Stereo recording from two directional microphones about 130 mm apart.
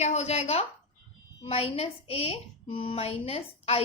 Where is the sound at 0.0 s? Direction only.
55° left (ahead or behind).